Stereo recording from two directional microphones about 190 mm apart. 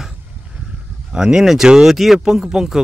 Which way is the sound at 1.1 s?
5° right (ahead or behind).